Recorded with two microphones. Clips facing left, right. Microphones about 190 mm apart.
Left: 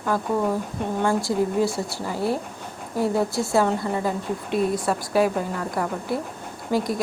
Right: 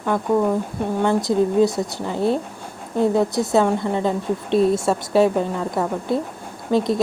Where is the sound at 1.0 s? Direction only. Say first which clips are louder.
Right 4 dB; 20° right (ahead or behind).